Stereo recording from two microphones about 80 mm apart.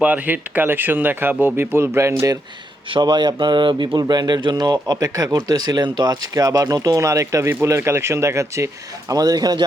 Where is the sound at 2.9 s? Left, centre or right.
Right.